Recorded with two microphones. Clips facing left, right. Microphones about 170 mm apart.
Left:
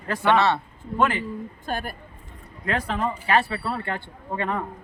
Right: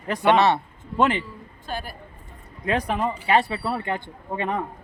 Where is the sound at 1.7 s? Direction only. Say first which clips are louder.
Left 2 dB; 50° left (ahead or behind).